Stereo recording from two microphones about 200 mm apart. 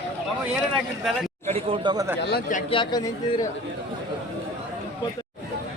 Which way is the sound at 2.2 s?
55° left (ahead or behind).